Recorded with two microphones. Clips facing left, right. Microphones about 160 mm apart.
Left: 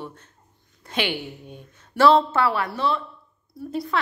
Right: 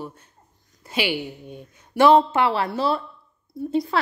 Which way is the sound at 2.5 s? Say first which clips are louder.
Right 2 dB; 30° right (ahead or behind).